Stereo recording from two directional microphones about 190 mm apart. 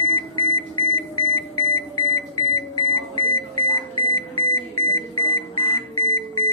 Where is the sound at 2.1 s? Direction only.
20° left (ahead or behind).